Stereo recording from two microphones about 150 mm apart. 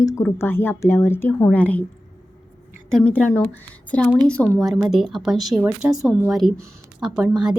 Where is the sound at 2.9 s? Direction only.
10° left (ahead or behind).